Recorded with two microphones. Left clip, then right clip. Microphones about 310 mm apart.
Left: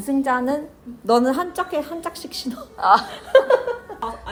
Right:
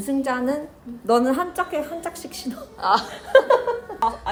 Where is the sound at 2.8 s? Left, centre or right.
Centre.